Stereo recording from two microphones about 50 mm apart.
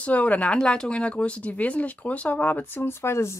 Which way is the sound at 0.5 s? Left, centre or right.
Centre.